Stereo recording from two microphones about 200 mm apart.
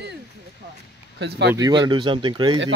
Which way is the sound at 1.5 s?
20° right (ahead or behind).